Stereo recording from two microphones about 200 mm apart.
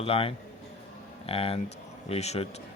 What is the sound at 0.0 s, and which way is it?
A man's voice, 30° left (ahead or behind).